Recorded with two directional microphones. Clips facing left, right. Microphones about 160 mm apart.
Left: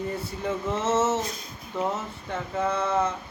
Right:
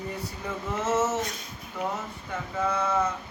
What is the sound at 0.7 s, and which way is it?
Speech, 25° left (ahead or behind).